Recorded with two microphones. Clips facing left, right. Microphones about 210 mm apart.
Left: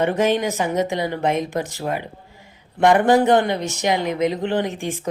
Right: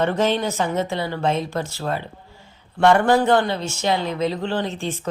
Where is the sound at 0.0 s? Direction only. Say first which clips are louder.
Left 1 dB; 15° left (ahead or behind).